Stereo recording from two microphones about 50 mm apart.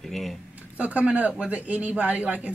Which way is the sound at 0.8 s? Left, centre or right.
Right.